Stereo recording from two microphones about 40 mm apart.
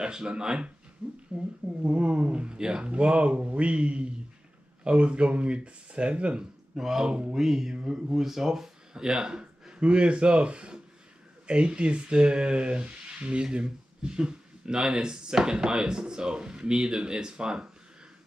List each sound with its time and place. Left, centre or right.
0.0 s speech: right
6.7 s speech: centre
7.3 s speech: centre
8.9 s speech: centre